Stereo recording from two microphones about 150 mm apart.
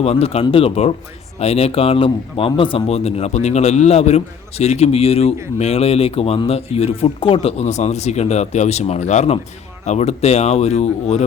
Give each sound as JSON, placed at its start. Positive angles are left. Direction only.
{"t": 0.0, "sound": "a man's voice", "side_deg": 45}